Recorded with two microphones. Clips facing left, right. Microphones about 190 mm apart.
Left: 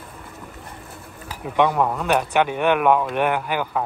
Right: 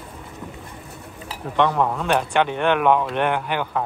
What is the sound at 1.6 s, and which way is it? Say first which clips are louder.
Speech: left 1 dB; 10° left (ahead or behind).